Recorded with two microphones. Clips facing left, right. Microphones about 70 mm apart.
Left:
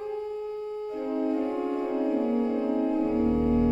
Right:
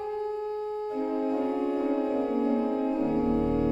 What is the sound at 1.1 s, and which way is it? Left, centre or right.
Music, right.